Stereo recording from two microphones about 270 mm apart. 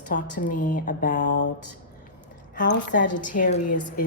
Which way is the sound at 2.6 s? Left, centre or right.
Left.